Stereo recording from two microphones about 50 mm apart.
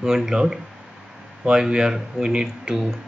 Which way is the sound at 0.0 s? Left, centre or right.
Centre.